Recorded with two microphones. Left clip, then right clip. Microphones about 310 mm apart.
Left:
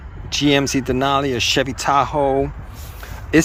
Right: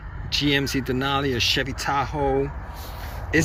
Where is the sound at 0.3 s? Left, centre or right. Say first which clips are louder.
Left 5 dB; centre.